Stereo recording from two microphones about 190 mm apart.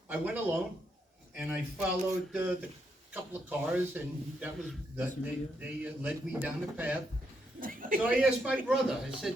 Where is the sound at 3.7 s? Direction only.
10° right (ahead or behind).